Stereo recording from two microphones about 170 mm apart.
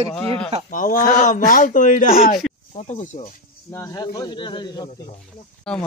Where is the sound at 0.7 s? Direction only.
50° left (ahead or behind).